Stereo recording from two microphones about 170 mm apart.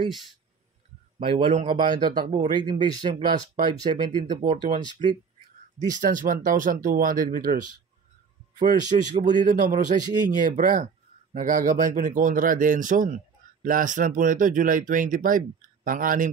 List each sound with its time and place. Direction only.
1.2 s a man's voice: 35° right (ahead or behind)
1.8 s speech: 25° right (ahead or behind)
4.3 s speech: 50° right (ahead or behind)
5.9 s speech: 50° right (ahead or behind)